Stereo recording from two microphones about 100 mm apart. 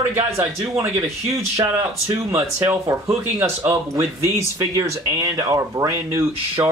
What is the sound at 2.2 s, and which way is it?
Speech, 30° right (ahead or behind).